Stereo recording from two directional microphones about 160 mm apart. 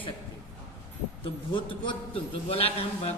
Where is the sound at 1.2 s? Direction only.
30° left (ahead or behind).